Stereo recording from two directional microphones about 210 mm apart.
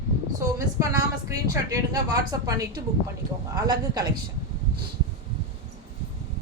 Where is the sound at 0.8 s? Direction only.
15° right (ahead or behind).